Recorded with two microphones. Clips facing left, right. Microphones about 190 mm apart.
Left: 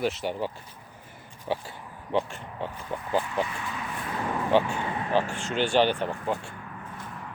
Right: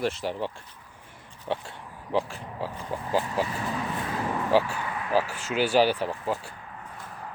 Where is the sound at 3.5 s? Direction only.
40° right (ahead or behind).